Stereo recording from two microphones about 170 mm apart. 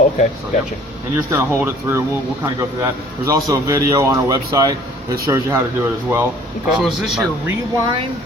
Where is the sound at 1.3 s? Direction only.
15° right (ahead or behind).